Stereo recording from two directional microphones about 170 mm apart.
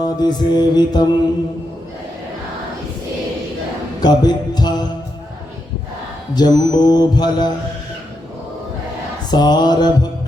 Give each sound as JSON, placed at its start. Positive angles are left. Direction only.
{"t": 0.0, "sound": "mantra", "side_deg": 25}
{"t": 4.0, "sound": "music", "side_deg": 25}
{"t": 6.3, "sound": "mantra", "side_deg": 25}
{"t": 9.3, "sound": "mantra", "side_deg": 25}